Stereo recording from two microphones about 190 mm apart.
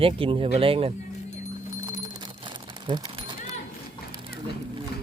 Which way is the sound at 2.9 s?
25° right (ahead or behind).